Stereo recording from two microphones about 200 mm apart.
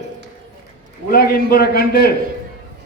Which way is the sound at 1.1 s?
50° left (ahead or behind).